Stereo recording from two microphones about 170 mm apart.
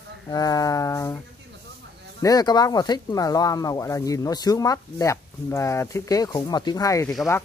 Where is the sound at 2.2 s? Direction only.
20° left (ahead or behind).